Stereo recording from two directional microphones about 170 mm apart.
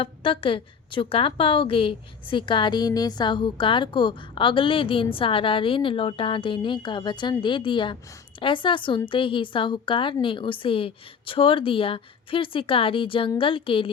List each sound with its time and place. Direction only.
0.0 s a woman's voice: 30° left (ahead or behind)